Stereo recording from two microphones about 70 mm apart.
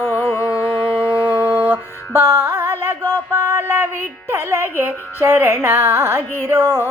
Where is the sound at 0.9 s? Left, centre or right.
Right.